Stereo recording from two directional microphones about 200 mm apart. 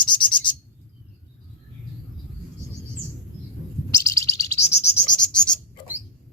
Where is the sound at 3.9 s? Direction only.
15° left (ahead or behind).